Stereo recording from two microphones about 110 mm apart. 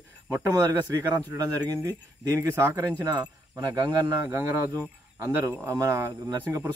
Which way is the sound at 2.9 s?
35° right (ahead or behind).